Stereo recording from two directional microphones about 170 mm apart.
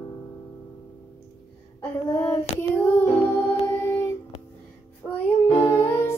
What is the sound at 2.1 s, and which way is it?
Female singing, 15° left (ahead or behind).